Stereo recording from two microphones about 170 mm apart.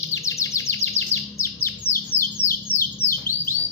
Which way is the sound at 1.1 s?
15° left (ahead or behind).